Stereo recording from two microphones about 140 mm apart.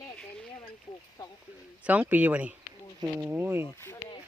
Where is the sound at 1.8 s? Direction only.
10° right (ahead or behind).